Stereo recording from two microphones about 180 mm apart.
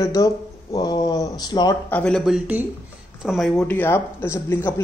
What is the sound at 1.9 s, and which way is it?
Speech, 5° left (ahead or behind).